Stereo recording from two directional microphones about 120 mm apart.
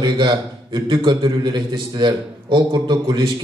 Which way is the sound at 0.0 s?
40° right (ahead or behind).